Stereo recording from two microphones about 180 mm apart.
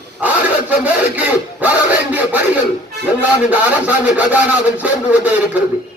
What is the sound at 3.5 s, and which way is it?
Speech, 10° right (ahead or behind).